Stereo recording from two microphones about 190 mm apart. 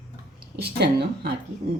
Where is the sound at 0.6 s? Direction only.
60° right (ahead or behind).